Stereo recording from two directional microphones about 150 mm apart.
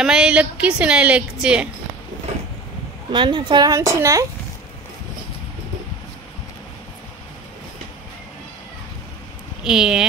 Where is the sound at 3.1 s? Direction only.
30° right (ahead or behind).